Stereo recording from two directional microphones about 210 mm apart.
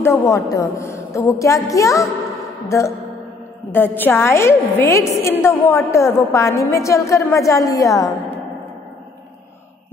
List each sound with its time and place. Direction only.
0.0 s a woman's voice: 15° left (ahead or behind)